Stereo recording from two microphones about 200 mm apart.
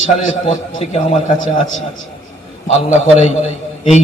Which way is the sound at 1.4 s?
80° left.